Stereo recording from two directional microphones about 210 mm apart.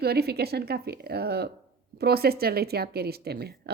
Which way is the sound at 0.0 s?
50° right (ahead or behind).